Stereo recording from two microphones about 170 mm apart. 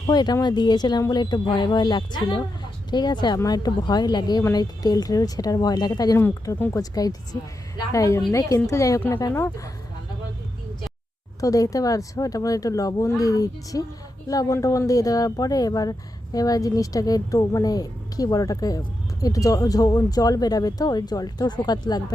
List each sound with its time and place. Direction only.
0.0 s speech: 25° left (ahead or behind)
11.3 s speech: 20° left (ahead or behind)